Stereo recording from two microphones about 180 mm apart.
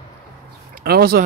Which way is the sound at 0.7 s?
55° right (ahead or behind).